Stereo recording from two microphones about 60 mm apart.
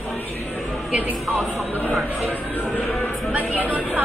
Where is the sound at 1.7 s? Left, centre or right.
Left.